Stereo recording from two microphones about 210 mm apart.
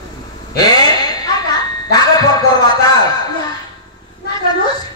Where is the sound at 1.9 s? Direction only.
20° left (ahead or behind).